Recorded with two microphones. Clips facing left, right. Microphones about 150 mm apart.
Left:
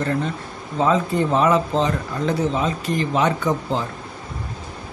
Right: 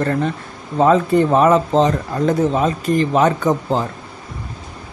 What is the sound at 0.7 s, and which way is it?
Speech, 55° right (ahead or behind).